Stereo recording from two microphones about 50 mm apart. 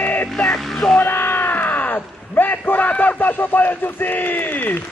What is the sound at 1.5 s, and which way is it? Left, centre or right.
A man's voice, left.